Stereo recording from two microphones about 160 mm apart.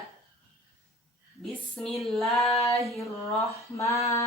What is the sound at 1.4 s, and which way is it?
A woman's voice, centre (ahead or behind).